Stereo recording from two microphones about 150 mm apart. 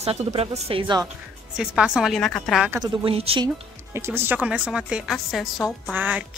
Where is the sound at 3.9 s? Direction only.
15° right (ahead or behind).